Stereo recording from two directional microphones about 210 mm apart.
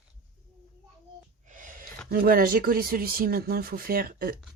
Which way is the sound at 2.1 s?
45° right (ahead or behind).